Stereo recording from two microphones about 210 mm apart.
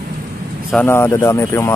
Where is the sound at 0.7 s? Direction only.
10° left (ahead or behind).